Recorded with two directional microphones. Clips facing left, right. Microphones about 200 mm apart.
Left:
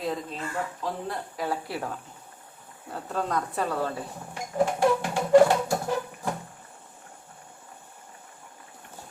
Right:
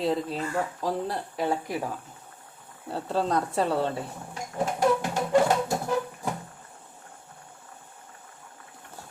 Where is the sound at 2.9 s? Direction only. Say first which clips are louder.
Right 3 dB; 30° right (ahead or behind).